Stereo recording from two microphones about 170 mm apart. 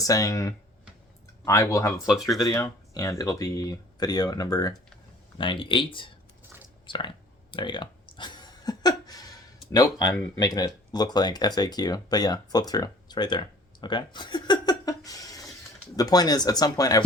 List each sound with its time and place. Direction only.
0.0 s speech: 20° left (ahead or behind)
2.0 s speech: centre (ahead or behind)
2.5 s speech: 20° left (ahead or behind)
7.5 s a sound: 30° left (ahead or behind)
9.7 s speech: 20° left (ahead or behind)
13.8 s a sound: 25° left (ahead or behind)
16.0 s speech: 20° left (ahead or behind)